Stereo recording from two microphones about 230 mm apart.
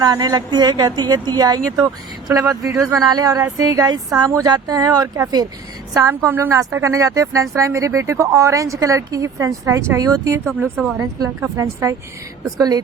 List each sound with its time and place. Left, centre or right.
0.0 s speech: centre
10.4 s speech: centre